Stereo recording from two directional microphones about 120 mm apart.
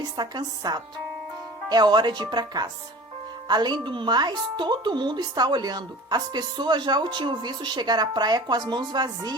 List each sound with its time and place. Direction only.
0.0 s speech: 35° right (ahead or behind)